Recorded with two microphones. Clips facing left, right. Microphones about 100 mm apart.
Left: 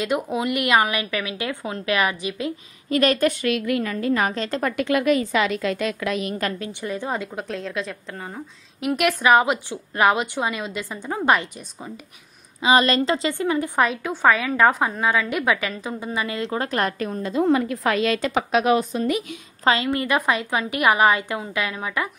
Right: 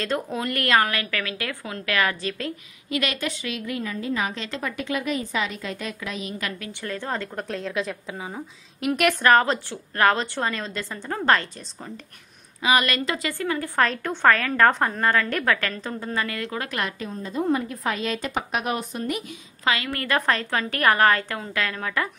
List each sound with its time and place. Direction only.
0.0 s a woman's voice: 15° left (ahead or behind)
2.9 s a woman's voice: 40° left (ahead or behind); by 6.3 s 65° left (ahead or behind)
6.8 s a woman's voice: 15° left (ahead or behind)
7.3 s a woman's voice: centre (ahead or behind)
12.6 s a woman's voice: 30° left (ahead or behind)
17.0 s a woman's voice: 85° left
19.6 s a woman's voice: 25° left (ahead or behind)